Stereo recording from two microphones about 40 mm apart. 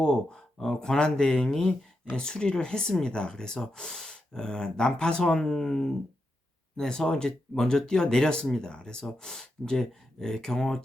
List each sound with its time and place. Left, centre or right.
0.0 s speech: left